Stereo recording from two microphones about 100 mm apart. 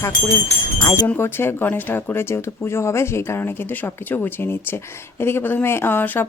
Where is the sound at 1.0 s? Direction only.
20° left (ahead or behind).